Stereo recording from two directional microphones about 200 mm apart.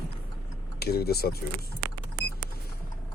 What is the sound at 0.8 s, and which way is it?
Speech, 50° left (ahead or behind).